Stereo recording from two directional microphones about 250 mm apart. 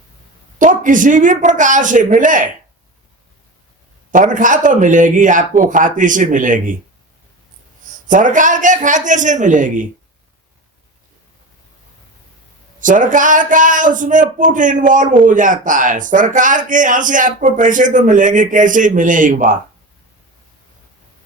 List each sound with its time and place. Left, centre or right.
0.6 s speech: right
4.1 s speech: right
8.0 s speech: right
12.8 s speech: right